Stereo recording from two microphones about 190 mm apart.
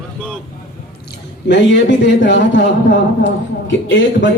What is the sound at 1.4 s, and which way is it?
A man's voice, 70° left (ahead or behind).